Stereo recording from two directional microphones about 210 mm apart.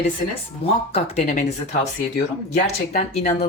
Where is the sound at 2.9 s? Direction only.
35° left (ahead or behind).